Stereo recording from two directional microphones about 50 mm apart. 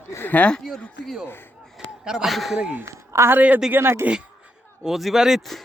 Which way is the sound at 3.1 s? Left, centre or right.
Right.